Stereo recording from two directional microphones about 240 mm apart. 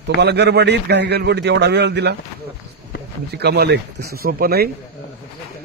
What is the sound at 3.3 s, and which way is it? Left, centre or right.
Speech, right.